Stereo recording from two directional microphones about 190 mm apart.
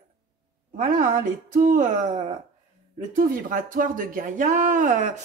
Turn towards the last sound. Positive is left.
turn(degrees=-40)  # may be behind; listen again after turning